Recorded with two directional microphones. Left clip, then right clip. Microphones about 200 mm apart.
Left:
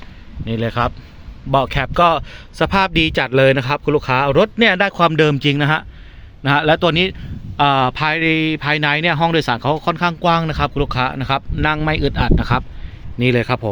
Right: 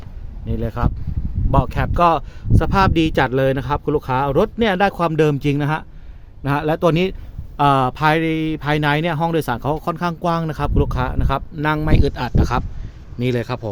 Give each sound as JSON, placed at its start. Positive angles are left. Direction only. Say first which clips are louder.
{"t": 0.4, "sound": "speech", "louder": "left 6 dB", "side_deg": 10}